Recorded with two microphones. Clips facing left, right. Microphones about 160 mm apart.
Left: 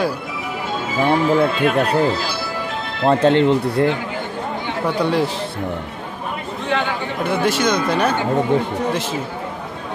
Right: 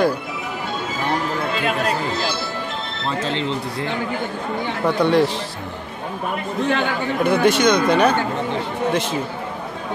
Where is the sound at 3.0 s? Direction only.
60° left (ahead or behind).